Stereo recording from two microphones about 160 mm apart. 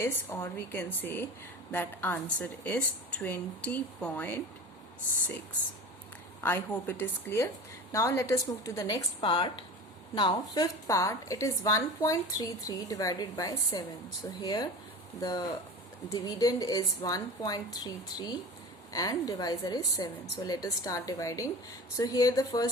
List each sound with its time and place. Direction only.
0.0 s a woman's voice: 15° left (ahead or behind)
6.4 s a woman's voice: 15° left (ahead or behind)